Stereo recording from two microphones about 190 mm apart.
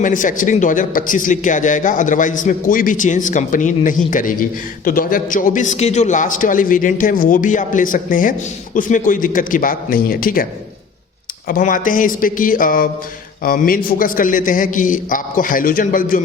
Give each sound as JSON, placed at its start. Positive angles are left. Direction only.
{"t": 0.0, "sound": "a man's voice", "side_deg": 45}
{"t": 11.4, "sound": "a man's voice", "side_deg": 45}